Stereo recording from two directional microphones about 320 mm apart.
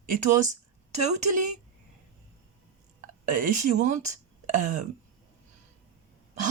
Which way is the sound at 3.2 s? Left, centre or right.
Right.